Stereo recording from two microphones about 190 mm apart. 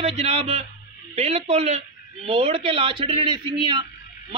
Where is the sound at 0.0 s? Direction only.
30° right (ahead or behind).